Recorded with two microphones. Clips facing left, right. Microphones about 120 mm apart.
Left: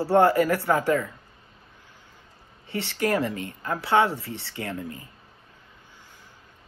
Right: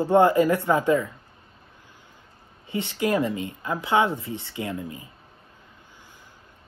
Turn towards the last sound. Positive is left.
turn(degrees=-15)  # may be behind; listen again after turning